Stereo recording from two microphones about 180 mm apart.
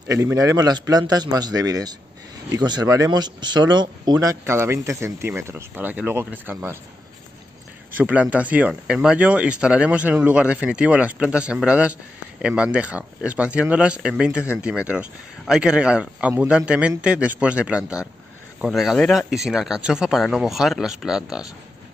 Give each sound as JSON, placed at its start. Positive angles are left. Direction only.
{"t": 0.1, "sound": "a man's voice", "side_deg": -15}
{"t": 7.9, "sound": "speech", "side_deg": -10}